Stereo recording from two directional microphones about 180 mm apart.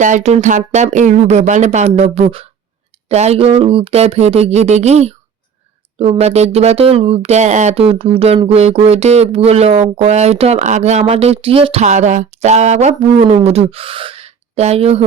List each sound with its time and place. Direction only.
0.0 s speech: 40° right (ahead or behind)